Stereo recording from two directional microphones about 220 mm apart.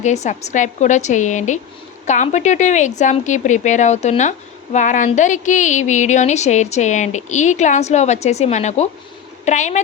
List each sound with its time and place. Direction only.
0.0 s a woman's voice: 30° left (ahead or behind)